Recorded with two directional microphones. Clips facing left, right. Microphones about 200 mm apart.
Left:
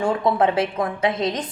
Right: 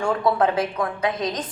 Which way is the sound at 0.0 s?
20° left (ahead or behind).